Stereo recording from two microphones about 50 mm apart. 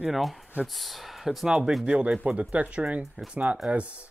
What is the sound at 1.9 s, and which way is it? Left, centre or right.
Speech, right.